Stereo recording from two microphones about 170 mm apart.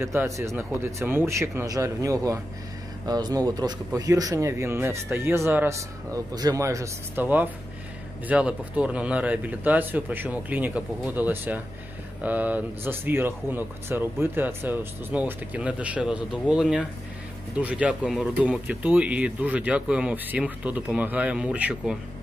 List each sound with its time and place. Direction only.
0.0 s speech: 15° right (ahead or behind)